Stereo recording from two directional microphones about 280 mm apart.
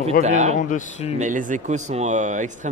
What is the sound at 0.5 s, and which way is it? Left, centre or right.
Speech, left.